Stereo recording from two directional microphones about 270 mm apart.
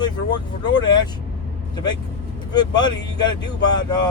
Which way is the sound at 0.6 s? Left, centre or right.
Centre.